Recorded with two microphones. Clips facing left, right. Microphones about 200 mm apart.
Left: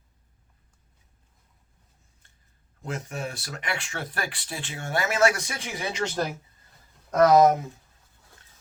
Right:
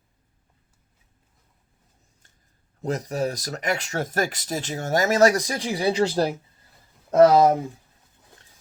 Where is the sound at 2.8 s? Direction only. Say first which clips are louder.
Right 8 dB; 40° right (ahead or behind).